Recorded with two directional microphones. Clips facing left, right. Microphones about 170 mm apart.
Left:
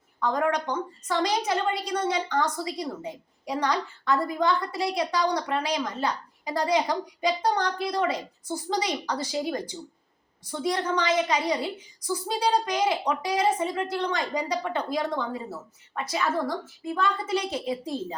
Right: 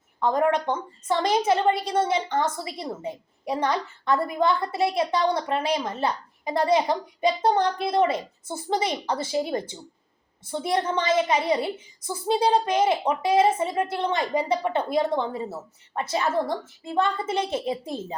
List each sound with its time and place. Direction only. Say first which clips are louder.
0.2 s a woman's voice: right 3 dB; 25° right (ahead or behind)